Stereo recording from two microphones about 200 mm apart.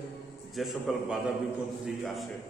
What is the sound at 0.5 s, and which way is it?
A man's voice, centre (ahead or behind).